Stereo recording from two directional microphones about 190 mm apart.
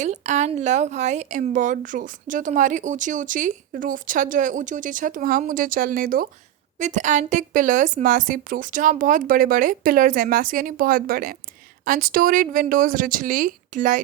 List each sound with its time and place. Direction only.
0.0 s a woman's voice: 40° right (ahead or behind)